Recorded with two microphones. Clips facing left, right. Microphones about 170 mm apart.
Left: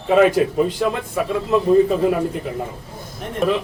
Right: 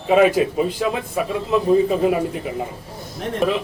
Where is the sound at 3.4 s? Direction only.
Centre (ahead or behind).